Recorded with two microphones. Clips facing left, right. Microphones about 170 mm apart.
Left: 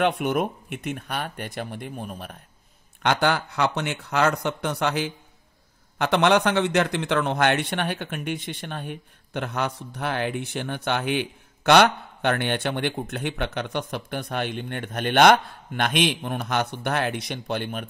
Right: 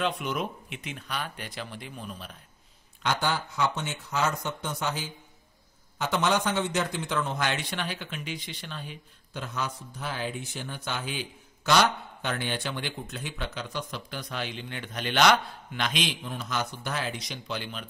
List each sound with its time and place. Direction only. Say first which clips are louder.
0.2 s speech: left 7 dB; 55° left (ahead or behind)
3.0 s a man's voice: left 6 dB; 65° left (ahead or behind)